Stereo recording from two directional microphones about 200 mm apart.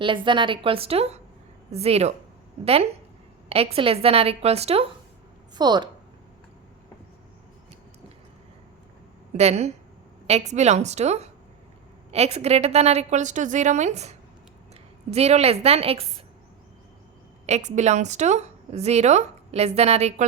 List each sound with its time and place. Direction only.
0.0 s a woman's voice: 25° right (ahead or behind)
3.5 s a woman's voice: 30° right (ahead or behind)
9.4 s a woman's voice: 30° right (ahead or behind)
17.4 s a woman's voice: 35° right (ahead or behind)